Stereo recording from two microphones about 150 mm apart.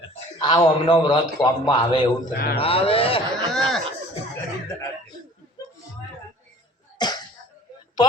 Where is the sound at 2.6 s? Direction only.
40° left (ahead or behind).